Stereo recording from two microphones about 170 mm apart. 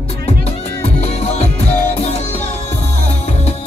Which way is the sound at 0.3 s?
40° left (ahead or behind).